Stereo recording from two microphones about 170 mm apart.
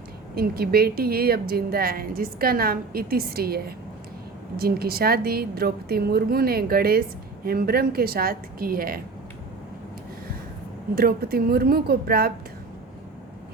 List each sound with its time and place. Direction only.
0.3 s a woman's voice: 65° right (ahead or behind)
10.9 s a woman's voice: 60° right (ahead or behind)